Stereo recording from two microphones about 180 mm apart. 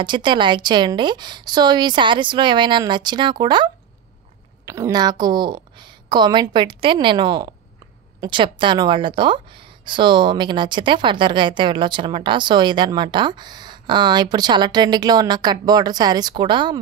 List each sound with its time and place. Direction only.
0.0 s a woman's voice: 25° right (ahead or behind)